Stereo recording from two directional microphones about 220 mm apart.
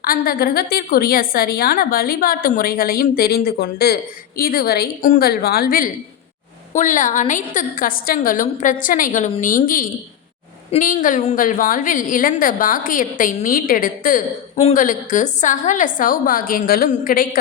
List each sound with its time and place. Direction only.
0.0 s a woman's voice: 40° left (ahead or behind)